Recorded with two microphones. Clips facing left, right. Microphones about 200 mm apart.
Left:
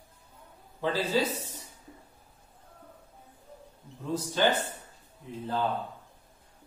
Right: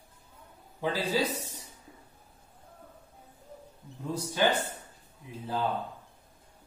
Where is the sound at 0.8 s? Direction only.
15° right (ahead or behind).